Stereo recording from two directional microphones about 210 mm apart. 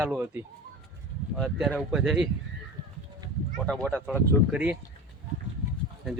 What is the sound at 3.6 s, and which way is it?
A man's voice, 5° left (ahead or behind).